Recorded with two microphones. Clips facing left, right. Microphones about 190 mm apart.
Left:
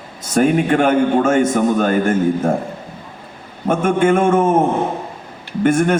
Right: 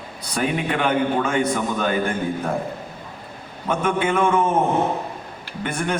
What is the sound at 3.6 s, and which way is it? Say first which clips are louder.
Speech: left 7 dB; 45° left (ahead or behind).